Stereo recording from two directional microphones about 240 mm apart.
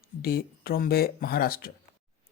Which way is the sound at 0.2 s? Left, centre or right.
Left.